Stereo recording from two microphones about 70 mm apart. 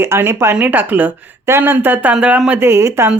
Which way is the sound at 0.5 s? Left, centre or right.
Right.